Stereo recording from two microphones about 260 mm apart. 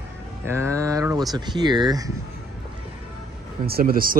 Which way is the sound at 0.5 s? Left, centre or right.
Centre.